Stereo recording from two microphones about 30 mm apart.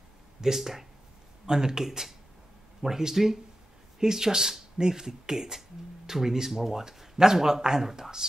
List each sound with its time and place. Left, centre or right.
0.6 s speech: centre
1.4 s speech: centre